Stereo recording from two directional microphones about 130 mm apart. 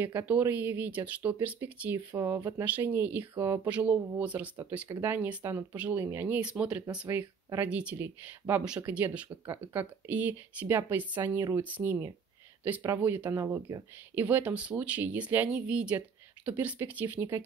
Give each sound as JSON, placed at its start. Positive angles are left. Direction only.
{"t": 0.0, "sound": "speech", "side_deg": -15}